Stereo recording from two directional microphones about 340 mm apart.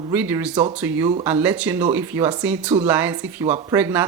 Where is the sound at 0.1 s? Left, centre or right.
Centre.